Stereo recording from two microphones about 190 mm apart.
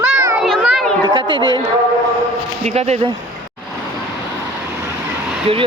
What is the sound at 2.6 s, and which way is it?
Speech, 35° right (ahead or behind).